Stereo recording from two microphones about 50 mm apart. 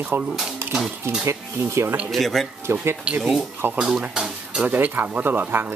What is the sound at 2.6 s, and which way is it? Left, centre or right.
Speech, right.